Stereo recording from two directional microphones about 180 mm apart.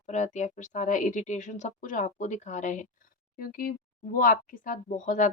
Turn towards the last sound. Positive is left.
turn(degrees=45)  # may be behind; listen again after turning